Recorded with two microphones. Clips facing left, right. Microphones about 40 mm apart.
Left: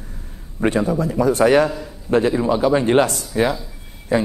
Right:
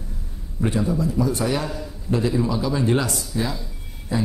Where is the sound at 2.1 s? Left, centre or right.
Left.